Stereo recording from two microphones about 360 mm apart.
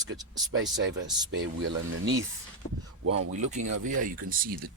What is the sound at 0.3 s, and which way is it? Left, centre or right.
Speech, right.